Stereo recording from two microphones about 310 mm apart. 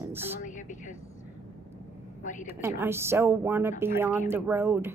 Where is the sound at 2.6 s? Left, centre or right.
Centre.